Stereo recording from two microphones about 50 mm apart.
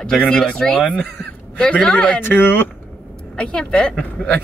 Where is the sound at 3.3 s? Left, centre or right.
Centre.